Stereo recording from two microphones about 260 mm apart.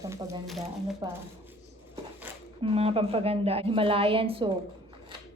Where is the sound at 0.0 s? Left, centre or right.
Centre.